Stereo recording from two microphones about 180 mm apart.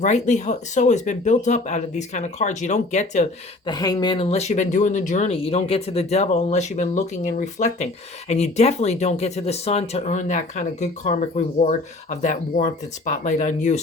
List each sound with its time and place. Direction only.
0.0 s speech: 40° left (ahead or behind)
3.7 s speech: 20° left (ahead or behind); by 13.8 s 45° left (ahead or behind)